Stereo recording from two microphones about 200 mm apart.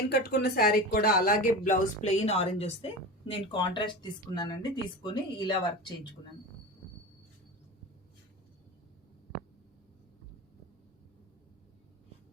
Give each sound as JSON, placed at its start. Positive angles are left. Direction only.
{"t": 0.1, "sound": "speech", "side_deg": 50}